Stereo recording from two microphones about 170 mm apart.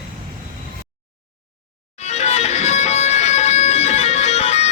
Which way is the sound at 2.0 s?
40° left (ahead or behind).